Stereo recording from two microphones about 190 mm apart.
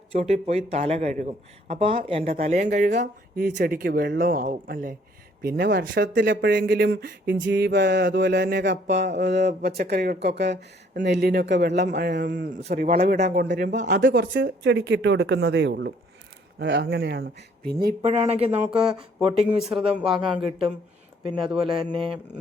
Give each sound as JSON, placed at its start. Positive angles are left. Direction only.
{"t": 0.1, "sound": "speech", "side_deg": -35}
{"t": 12.7, "sound": "speech", "side_deg": -50}
{"t": 13.2, "sound": "speech", "side_deg": -60}
{"t": 18.0, "sound": "speech", "side_deg": -35}
{"t": 19.5, "sound": "speech", "side_deg": -5}
{"t": 20.1, "sound": "speech", "side_deg": -25}